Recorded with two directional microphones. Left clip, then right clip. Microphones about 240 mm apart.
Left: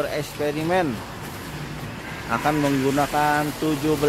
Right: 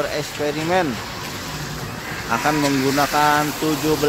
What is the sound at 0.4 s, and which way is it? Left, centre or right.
Speech, centre.